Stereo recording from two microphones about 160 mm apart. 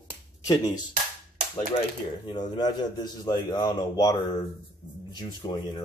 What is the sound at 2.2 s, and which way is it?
A man's voice, 30° left (ahead or behind).